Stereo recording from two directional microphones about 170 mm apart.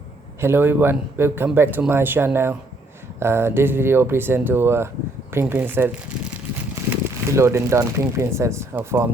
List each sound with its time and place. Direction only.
0.4 s speech: 15° right (ahead or behind)
6.9 s speech: 15° right (ahead or behind)